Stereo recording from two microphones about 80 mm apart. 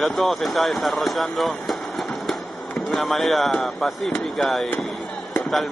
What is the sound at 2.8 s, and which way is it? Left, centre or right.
Speech, centre.